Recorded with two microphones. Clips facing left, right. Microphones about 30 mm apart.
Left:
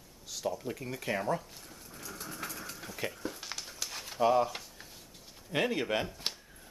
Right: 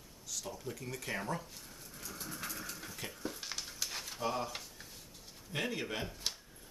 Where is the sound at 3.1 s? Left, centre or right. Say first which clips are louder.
Left 2 dB; centre.